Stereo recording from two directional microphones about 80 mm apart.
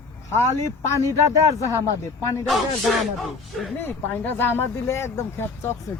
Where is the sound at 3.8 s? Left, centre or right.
Left.